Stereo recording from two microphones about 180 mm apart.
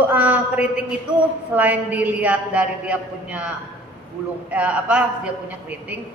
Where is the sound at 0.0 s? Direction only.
10° right (ahead or behind).